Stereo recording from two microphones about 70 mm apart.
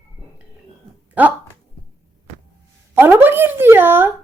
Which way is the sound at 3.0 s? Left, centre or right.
Right.